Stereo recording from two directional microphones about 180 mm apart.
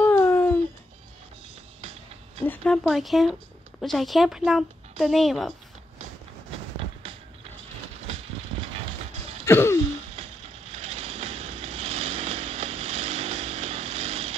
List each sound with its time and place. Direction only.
0.0 s a sound: 15° left (ahead or behind)
1.8 s music: 35° right (ahead or behind)
2.4 s a woman's voice: 10° left (ahead or behind)
8.1 s vehicle: 35° right (ahead or behind)
9.5 s throat clearing: 15° left (ahead or behind)
10.1 s a sound: 35° right (ahead or behind)